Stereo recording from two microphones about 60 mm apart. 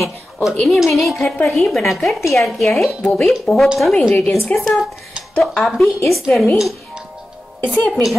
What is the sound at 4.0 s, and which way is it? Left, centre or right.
Speech, left.